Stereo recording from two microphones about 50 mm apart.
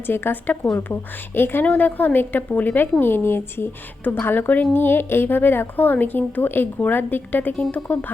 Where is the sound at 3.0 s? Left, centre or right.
Left.